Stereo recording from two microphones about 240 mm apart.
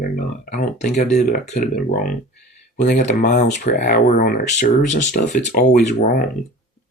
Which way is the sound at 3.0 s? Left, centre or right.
Left.